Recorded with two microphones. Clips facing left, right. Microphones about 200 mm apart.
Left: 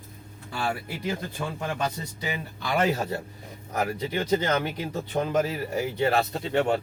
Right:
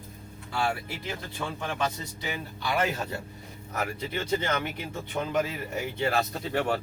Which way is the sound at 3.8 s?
35° left (ahead or behind).